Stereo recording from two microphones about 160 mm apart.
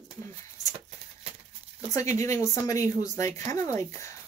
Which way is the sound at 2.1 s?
20° left (ahead or behind).